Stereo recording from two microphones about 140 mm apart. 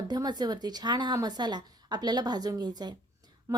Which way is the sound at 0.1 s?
30° right (ahead or behind).